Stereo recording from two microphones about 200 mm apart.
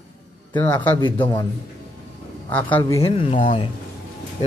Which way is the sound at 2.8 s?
25° left (ahead or behind).